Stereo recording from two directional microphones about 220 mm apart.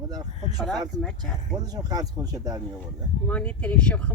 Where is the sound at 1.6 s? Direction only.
15° right (ahead or behind).